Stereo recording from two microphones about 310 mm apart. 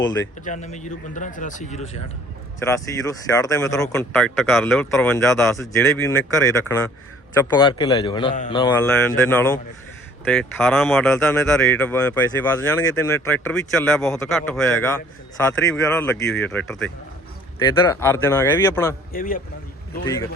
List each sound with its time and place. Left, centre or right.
0.0 s speech: centre
0.4 s speech: left
2.6 s speech: centre
17.6 s speech: centre
19.1 s speech: left